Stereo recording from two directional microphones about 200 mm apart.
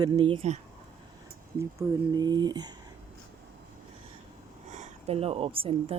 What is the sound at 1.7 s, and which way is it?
Speech, 20° right (ahead or behind).